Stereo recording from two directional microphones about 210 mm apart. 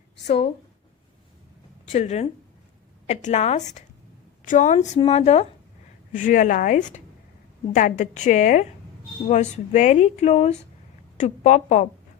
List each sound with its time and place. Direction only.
1.9 s speech: 30° left (ahead or behind)